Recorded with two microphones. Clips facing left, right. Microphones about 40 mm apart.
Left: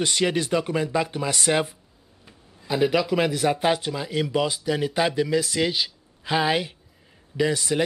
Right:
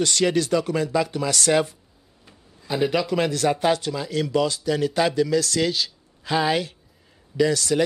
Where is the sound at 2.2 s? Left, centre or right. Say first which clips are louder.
Left 1 dB; centre.